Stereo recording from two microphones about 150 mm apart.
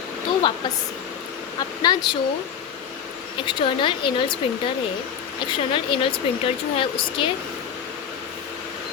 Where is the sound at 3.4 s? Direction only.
35° left (ahead or behind).